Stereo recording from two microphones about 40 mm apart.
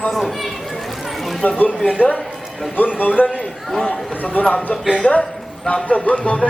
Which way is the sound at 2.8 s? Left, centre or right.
Left.